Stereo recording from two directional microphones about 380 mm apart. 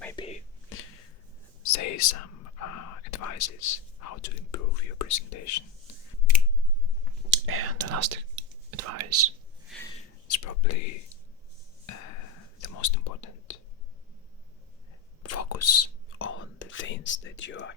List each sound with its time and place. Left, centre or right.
0.0 s whispering: centre
1.6 s speech: left
7.3 s speech: right
10.2 s speech: left
12.6 s whispering: left
15.2 s whispering: left